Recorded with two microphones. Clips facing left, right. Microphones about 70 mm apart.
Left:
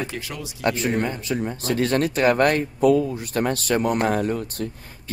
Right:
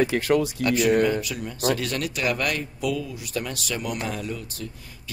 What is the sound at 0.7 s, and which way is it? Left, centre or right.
Speech, left.